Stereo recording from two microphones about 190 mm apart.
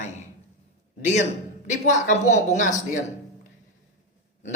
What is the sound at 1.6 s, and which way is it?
Speech, 40° left (ahead or behind).